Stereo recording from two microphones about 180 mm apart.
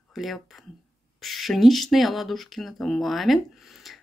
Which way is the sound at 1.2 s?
Centre (ahead or behind).